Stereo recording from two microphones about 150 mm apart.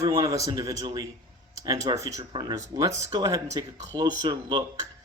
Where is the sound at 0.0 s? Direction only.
25° right (ahead or behind).